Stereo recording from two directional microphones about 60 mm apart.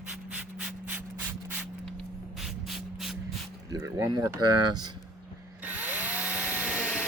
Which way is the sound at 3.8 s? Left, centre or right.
Right.